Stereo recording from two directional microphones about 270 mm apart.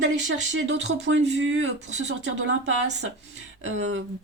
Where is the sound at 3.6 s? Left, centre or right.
Right.